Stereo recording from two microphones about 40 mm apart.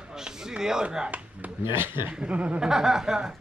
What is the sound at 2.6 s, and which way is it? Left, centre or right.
Snicker, centre.